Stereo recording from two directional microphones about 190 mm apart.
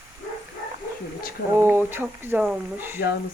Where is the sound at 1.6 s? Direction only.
10° right (ahead or behind).